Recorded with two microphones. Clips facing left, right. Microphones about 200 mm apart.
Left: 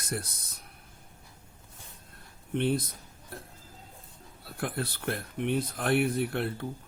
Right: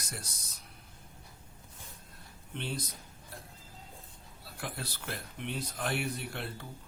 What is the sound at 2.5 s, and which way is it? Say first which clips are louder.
Speech: left 11 dB; 55° left (ahead or behind).